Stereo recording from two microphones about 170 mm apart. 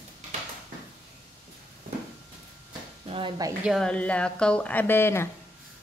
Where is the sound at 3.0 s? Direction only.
35° right (ahead or behind).